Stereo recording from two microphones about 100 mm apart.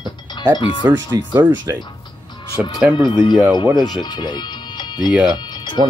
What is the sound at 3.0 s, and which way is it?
Speech, 50° left (ahead or behind).